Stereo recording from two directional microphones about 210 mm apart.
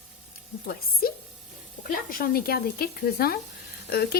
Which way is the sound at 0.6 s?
45° left (ahead or behind).